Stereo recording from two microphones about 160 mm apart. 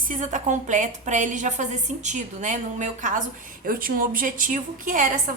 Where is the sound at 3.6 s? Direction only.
60° right (ahead or behind).